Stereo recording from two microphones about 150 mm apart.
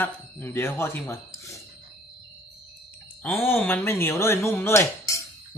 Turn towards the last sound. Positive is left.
turn(degrees=20)  # may be behind; listen again after turning